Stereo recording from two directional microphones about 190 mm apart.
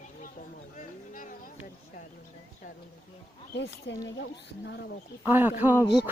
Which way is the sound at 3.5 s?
65° left (ahead or behind).